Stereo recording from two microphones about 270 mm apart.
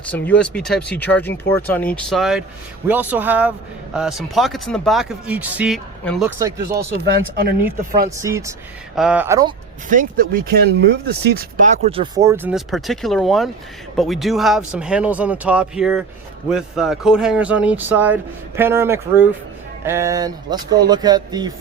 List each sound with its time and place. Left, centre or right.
0.1 s speech: centre
6.4 s speech: centre
8.1 s speech: centre
9.9 s speech: right